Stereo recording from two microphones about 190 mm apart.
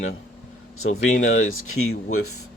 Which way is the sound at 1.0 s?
40° left (ahead or behind).